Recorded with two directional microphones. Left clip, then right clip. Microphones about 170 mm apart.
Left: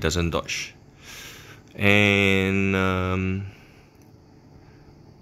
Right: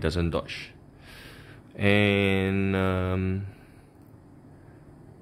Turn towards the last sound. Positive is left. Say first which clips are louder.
# left 3 dB
turn(degrees=5)  # may be behind; listen again after turning